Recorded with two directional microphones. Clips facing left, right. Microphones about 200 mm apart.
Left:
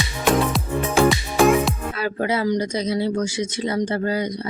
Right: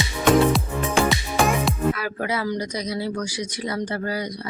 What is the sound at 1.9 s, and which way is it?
Speech, 25° left (ahead or behind).